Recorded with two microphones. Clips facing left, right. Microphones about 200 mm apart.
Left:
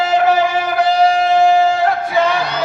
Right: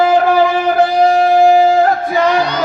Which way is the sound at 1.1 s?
50° right (ahead or behind).